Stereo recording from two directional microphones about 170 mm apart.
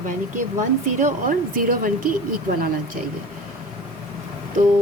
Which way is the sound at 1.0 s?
50° right (ahead or behind).